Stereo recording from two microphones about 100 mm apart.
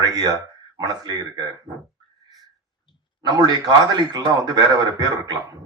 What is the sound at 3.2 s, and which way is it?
Speech, 45° right (ahead or behind).